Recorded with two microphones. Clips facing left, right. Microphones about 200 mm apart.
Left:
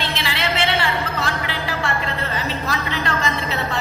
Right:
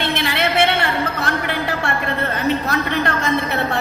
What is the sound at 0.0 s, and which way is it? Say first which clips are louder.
Music: right 5 dB; 60° right (ahead or behind).